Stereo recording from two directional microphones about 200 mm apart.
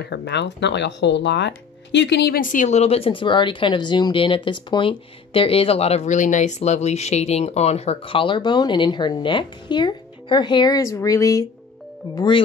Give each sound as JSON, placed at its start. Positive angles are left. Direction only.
{"t": 0.0, "sound": "speech", "side_deg": 55}